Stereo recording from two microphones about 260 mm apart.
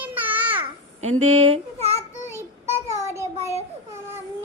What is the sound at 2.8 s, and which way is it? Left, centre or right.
Child singing, centre.